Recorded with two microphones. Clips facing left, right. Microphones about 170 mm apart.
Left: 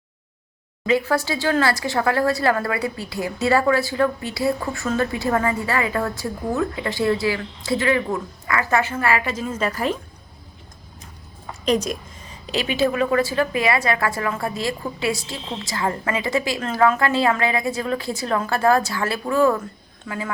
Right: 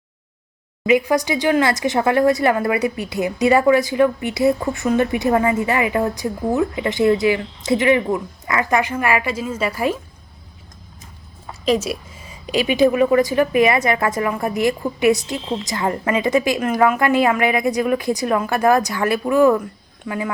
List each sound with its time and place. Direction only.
0.9 s speech: 15° right (ahead or behind)
11.6 s a woman's voice: 5° right (ahead or behind)